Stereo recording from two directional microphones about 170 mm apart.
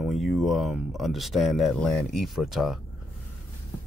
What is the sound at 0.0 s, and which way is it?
Speech, centre (ahead or behind).